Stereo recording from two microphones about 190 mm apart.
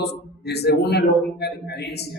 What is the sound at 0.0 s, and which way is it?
A man's voice, 60° left (ahead or behind).